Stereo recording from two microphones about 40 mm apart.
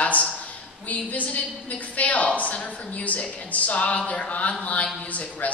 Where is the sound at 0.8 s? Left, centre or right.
Left.